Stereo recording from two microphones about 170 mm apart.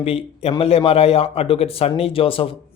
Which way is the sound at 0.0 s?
35° left (ahead or behind).